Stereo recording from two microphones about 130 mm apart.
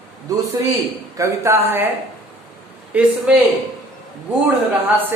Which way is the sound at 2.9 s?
10° right (ahead or behind).